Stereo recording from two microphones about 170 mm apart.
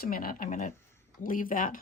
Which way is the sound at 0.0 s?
60° left (ahead or behind).